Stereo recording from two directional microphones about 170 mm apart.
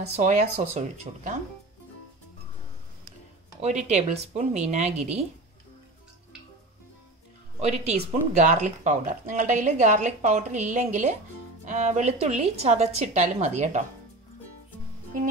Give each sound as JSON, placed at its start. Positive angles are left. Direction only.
{"t": 0.0, "sound": "a woman's voice", "side_deg": -40}
{"t": 3.6, "sound": "a woman's voice", "side_deg": -40}
{"t": 7.6, "sound": "a woman's voice", "side_deg": -40}